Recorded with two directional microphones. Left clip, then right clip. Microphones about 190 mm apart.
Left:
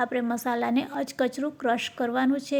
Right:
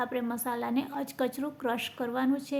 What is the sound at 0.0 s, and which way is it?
A woman's voice, 20° left (ahead or behind).